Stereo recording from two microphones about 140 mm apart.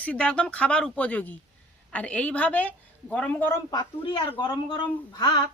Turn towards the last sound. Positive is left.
turn(degrees=30)  # may be behind; listen again after turning